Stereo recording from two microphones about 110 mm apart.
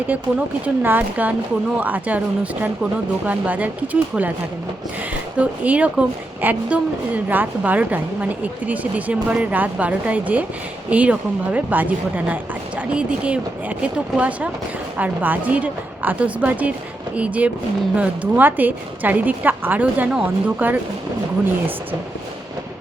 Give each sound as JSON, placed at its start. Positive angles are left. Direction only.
{"t": 0.1, "sound": "speech", "side_deg": -15}
{"t": 5.4, "sound": "speech", "side_deg": -15}